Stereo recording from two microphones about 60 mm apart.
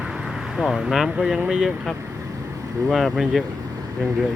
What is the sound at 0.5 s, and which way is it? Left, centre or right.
Speech, centre.